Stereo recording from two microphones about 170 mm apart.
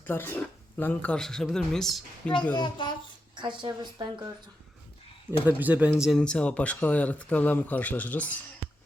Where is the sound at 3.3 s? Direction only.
30° right (ahead or behind).